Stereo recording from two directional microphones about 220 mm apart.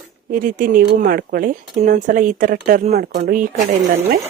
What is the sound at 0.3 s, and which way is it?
Speech, 40° right (ahead or behind).